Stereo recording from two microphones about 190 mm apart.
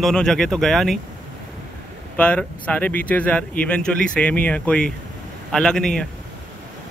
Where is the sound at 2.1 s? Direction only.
5° left (ahead or behind).